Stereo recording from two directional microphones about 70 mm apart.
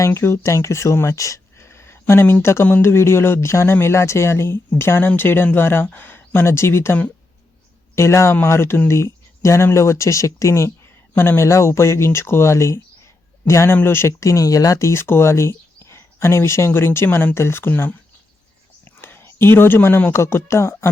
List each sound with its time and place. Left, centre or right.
0.0 s speech: left
7.9 s speech: left